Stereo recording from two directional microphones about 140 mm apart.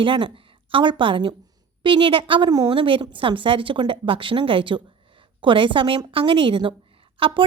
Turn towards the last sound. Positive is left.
turn(degrees=-40)  # may be behind; listen again after turning